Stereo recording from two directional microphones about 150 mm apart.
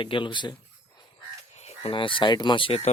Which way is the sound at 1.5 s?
45° left (ahead or behind).